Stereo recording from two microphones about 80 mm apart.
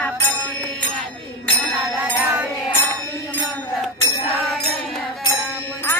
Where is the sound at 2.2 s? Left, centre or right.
Right.